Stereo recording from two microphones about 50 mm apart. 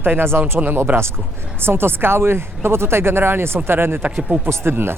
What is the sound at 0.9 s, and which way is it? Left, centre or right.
Speech, right.